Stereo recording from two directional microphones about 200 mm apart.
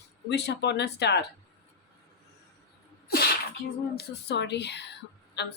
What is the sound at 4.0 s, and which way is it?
Speech, 60° left (ahead or behind).